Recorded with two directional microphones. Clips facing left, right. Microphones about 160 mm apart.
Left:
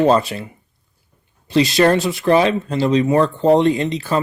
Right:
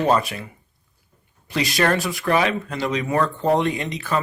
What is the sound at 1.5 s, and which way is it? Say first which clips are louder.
Speech: left 7 dB; 30° left (ahead or behind).